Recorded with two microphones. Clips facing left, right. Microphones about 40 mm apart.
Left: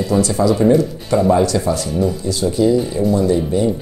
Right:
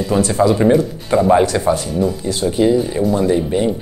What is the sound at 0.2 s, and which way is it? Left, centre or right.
Speech, right.